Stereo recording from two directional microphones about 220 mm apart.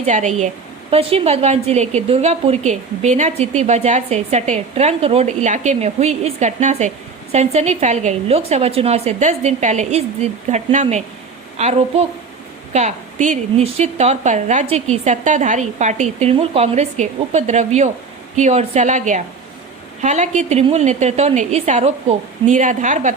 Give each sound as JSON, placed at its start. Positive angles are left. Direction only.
{"t": 0.0, "sound": "a woman's voice", "side_deg": -35}